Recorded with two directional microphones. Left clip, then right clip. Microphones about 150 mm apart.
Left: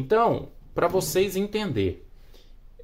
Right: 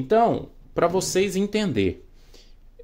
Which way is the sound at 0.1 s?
20° right (ahead or behind).